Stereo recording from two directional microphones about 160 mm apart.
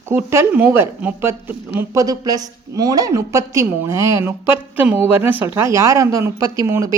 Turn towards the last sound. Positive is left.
turn(degrees=-20)  # may be behind; listen again after turning